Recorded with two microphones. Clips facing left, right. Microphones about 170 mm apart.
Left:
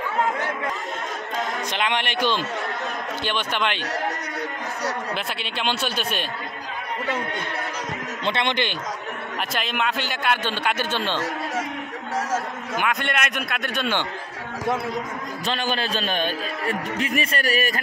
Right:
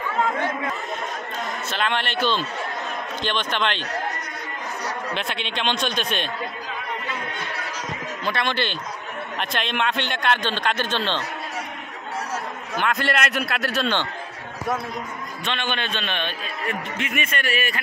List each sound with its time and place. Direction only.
1.7 s a man's voice: 15° left (ahead or behind)
5.1 s a man's voice: 5° left (ahead or behind)
8.3 s speech: 20° left (ahead or behind)
9.4 s a man's voice: 5° left (ahead or behind)
12.9 s a man's voice: centre (ahead or behind)
15.4 s a man's voice: 35° left (ahead or behind)